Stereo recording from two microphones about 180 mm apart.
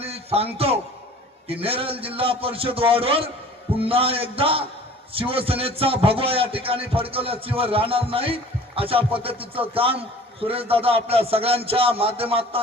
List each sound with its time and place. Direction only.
0.0 s music: 35° right (ahead or behind)
1.6 s speech: 30° right (ahead or behind)